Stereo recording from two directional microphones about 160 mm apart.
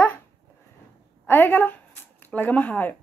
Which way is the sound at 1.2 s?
10° left (ahead or behind).